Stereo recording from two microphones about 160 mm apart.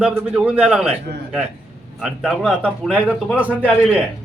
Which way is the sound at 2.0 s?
5° right (ahead or behind).